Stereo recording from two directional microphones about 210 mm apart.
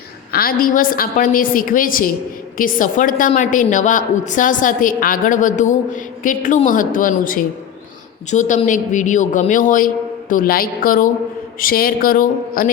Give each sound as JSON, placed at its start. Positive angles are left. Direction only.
{"t": 0.3, "sound": "a woman's voice", "side_deg": 45}